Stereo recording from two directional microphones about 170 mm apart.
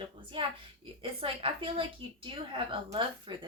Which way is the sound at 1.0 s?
35° right (ahead or behind).